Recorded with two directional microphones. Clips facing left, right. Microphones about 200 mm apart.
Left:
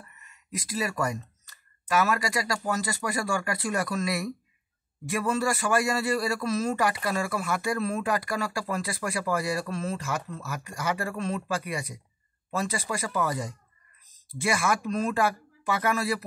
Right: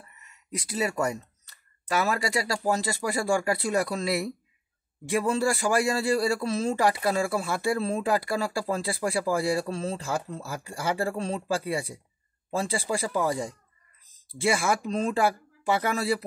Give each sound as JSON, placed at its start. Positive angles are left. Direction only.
{"t": 0.7, "sound": "a man's voice", "side_deg": -25}
{"t": 14.4, "sound": "a man's voice", "side_deg": -30}